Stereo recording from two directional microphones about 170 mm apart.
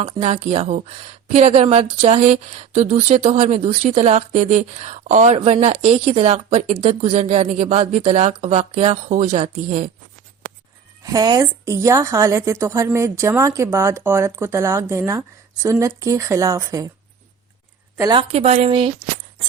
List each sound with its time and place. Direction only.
0.0 s speech: 40° right (ahead or behind)
11.0 s a woman's voice: 20° right (ahead or behind)
17.9 s speech: 25° right (ahead or behind)